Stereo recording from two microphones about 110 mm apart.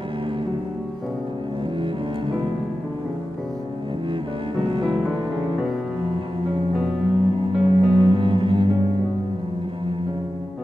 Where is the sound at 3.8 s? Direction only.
50° right (ahead or behind).